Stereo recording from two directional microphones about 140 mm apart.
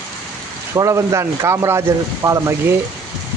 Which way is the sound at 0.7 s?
25° right (ahead or behind).